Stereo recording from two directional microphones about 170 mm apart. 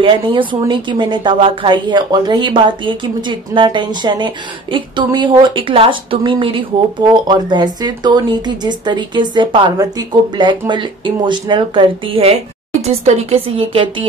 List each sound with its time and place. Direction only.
0.0 s a woman's voice: 30° right (ahead or behind)